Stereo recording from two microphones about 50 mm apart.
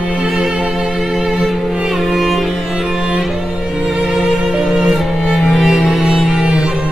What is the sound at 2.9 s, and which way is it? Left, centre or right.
Music, centre.